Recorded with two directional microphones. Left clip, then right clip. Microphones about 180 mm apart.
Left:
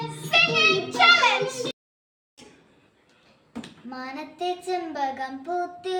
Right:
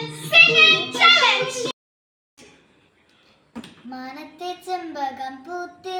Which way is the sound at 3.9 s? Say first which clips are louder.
Even; 10° left (ahead or behind).